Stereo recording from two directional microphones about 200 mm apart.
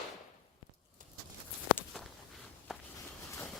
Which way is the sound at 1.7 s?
5° left (ahead or behind).